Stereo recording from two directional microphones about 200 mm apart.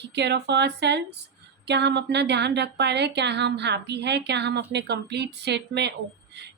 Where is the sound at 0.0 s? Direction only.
60° right (ahead or behind).